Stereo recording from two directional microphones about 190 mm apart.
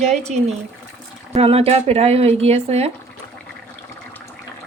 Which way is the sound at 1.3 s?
30° right (ahead or behind).